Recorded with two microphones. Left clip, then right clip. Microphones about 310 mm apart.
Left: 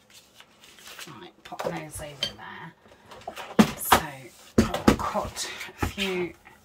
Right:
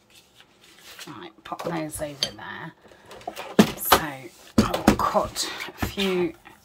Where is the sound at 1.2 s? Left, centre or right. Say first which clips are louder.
Right 1 dB; centre.